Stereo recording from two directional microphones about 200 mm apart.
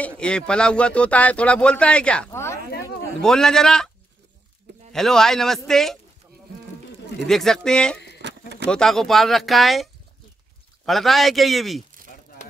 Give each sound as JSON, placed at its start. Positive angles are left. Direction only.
{"t": 0.0, "sound": "speech", "side_deg": 5}
{"t": 4.9, "sound": "speech", "side_deg": 0}
{"t": 7.2, "sound": "speech", "side_deg": 0}
{"t": 8.2, "sound": "a sound", "side_deg": -60}
{"t": 8.6, "sound": "speech", "side_deg": 5}
{"t": 10.9, "sound": "speech", "side_deg": 0}